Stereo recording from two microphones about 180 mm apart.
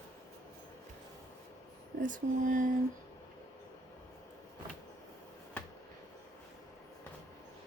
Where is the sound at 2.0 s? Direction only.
45° right (ahead or behind).